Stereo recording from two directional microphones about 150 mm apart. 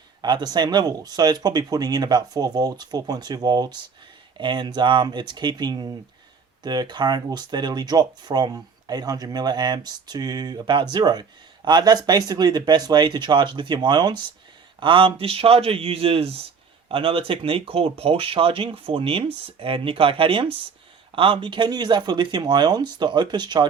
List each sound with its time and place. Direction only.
0.2 s speech: 30° right (ahead or behind)